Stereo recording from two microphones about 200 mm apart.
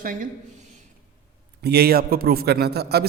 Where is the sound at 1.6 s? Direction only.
55° right (ahead or behind).